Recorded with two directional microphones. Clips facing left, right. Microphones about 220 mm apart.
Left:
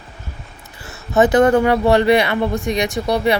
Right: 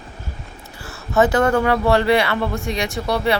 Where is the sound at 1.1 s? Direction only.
20° left (ahead or behind).